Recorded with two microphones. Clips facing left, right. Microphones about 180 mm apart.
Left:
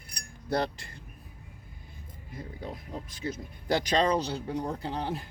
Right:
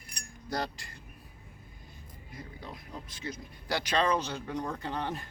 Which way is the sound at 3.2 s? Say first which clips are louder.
Left 5 dB; 35° left (ahead or behind).